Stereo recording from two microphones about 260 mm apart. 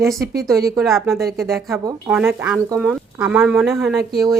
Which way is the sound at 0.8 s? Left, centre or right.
Centre.